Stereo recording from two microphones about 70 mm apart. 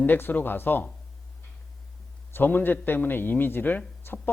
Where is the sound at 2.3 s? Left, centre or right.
Left.